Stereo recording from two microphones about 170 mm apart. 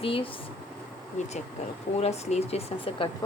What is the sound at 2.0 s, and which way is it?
A woman's voice, 40° left (ahead or behind).